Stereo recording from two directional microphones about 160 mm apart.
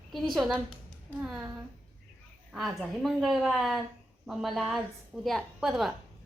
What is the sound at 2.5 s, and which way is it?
A woman's voice, centre (ahead or behind).